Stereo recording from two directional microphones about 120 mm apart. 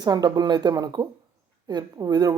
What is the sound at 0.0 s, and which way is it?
A woman's voice, 35° right (ahead or behind).